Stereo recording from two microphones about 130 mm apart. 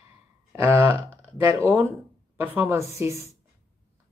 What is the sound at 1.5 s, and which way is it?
Speech, 15° right (ahead or behind).